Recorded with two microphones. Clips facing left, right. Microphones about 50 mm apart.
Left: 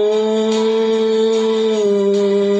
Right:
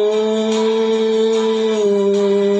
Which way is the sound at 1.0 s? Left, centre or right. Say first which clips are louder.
Even; right.